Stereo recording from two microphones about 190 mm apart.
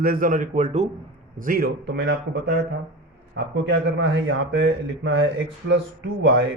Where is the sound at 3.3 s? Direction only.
75° right (ahead or behind).